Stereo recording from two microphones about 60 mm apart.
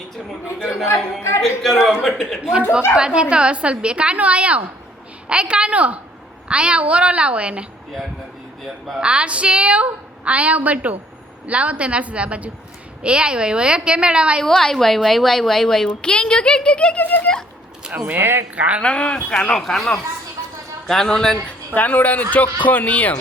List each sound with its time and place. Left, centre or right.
1.4 s a woman's voice: centre
2.9 s a woman's voice: centre
9.0 s a woman's voice: centre
14.4 s a woman's voice: centre
16.0 s speech: centre
17.8 s speech: centre
18.2 s speech: right
18.5 s a woman's voice: right
18.8 s speech: centre
19.5 s a woman's voice: centre
21.8 s speech: left